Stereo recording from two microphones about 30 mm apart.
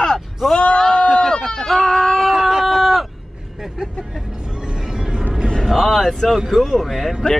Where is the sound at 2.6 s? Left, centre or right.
Centre.